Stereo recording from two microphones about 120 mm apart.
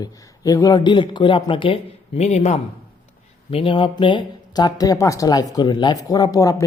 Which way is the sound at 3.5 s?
50° left (ahead or behind).